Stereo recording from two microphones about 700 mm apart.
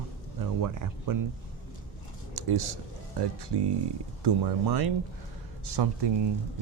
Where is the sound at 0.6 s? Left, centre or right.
Right.